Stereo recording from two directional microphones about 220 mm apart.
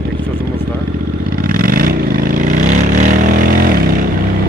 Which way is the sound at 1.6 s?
40° right (ahead or behind).